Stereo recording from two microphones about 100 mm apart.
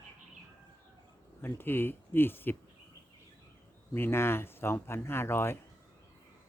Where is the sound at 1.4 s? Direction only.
20° left (ahead or behind).